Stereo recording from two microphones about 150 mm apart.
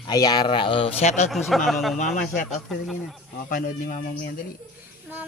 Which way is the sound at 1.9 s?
55° left (ahead or behind).